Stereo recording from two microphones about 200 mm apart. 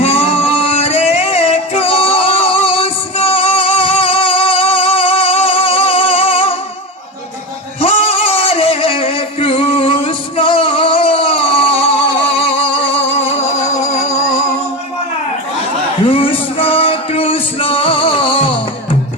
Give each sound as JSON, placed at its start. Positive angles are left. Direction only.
{"t": 0.0, "sound": "music", "side_deg": 30}
{"t": 7.8, "sound": "music", "side_deg": 30}
{"t": 16.0, "sound": "music", "side_deg": 25}